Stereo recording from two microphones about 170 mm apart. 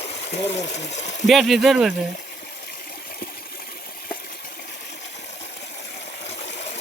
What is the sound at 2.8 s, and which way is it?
Water, 60° left (ahead or behind).